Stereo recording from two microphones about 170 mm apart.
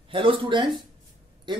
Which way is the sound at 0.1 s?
30° right (ahead or behind).